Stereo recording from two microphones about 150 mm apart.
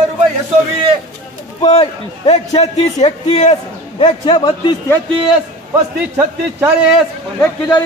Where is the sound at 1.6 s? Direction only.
40° left (ahead or behind).